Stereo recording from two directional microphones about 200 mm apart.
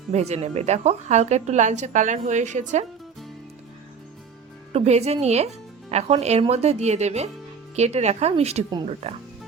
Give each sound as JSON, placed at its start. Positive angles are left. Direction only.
{"t": 0.1, "sound": "a woman's voice", "side_deg": -35}
{"t": 4.7, "sound": "a woman's voice", "side_deg": -30}